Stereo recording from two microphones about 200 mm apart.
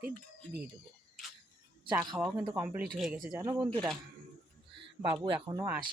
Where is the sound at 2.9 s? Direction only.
Centre (ahead or behind).